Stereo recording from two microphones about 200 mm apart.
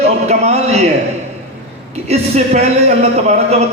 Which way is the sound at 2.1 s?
35° right (ahead or behind).